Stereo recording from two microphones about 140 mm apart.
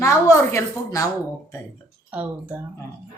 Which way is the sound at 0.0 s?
20° left (ahead or behind).